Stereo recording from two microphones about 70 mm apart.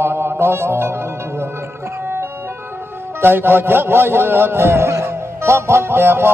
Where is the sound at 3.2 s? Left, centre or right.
Right.